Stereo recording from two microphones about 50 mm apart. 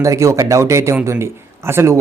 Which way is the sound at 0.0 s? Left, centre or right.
Right.